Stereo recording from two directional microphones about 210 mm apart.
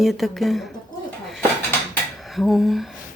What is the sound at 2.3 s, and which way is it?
Speech, centre (ahead or behind).